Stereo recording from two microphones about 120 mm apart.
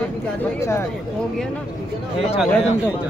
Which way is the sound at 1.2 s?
5° left (ahead or behind).